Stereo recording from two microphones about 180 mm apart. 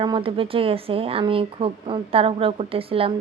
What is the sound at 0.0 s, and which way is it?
Speech, 25° right (ahead or behind).